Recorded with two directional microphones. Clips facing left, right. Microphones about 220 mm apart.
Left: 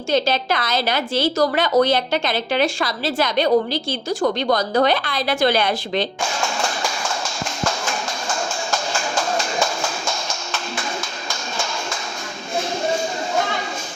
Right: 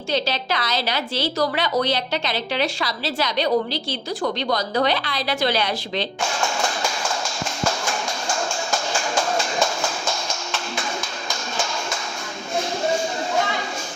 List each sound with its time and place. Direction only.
0.1 s a woman's voice: 50° left (ahead or behind)